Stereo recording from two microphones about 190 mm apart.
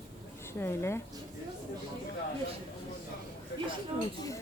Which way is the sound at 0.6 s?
10° left (ahead or behind).